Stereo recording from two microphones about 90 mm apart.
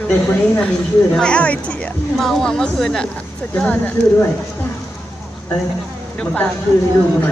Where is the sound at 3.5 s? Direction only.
15° left (ahead or behind).